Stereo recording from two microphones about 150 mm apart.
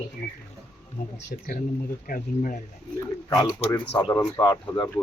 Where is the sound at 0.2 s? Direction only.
70° left (ahead or behind).